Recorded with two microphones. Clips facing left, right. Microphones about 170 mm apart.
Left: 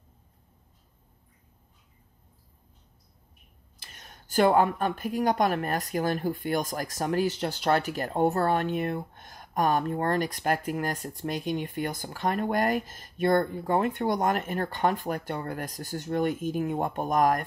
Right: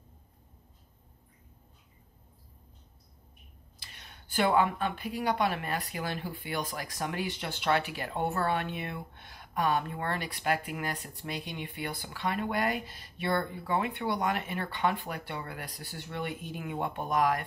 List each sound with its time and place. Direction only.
3.8 s speech: 45° left (ahead or behind)